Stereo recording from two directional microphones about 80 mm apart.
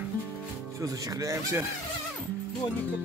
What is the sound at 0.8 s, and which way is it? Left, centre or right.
Speech, right.